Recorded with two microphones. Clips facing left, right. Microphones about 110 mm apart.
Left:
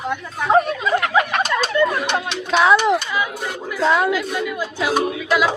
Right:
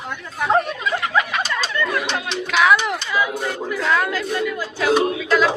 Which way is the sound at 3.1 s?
15° left (ahead or behind).